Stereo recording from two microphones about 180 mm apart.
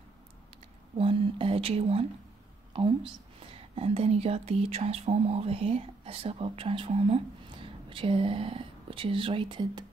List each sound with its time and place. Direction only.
0.9 s speech: 30° right (ahead or behind)
3.3 s speech: 30° right (ahead or behind)